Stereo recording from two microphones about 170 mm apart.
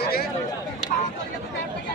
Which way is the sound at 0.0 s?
65° left (ahead or behind).